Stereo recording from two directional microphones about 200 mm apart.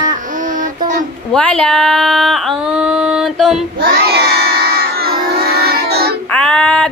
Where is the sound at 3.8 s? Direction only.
50° right (ahead or behind).